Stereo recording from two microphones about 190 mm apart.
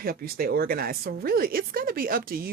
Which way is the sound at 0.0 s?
50° right (ahead or behind).